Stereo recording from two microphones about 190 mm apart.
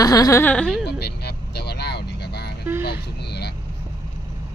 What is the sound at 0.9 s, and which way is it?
Vehicle, 60° left (ahead or behind).